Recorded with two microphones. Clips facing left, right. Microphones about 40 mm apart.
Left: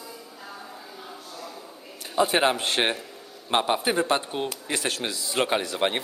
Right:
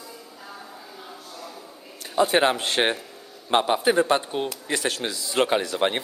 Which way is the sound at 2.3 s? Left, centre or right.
Centre.